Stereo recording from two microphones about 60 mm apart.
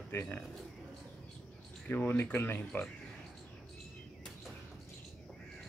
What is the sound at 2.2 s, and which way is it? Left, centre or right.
Speech, left.